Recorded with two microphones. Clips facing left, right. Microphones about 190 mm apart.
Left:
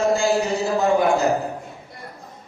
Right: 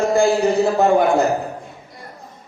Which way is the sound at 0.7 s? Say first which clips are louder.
Right 3 dB; 55° right (ahead or behind).